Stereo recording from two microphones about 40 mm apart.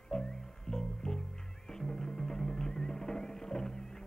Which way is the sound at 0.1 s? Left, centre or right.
Centre.